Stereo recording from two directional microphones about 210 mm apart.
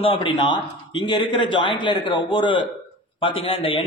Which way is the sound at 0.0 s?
25° left (ahead or behind).